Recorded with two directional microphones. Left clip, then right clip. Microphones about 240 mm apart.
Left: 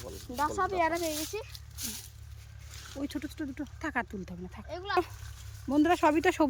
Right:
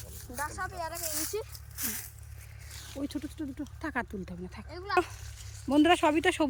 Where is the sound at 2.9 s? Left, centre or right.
Centre.